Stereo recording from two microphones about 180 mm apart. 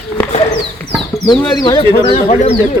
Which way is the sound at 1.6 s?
25° left (ahead or behind).